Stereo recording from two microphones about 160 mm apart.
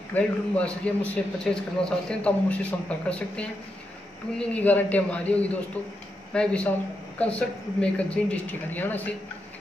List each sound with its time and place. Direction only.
0.1 s a man's voice: 10° left (ahead or behind)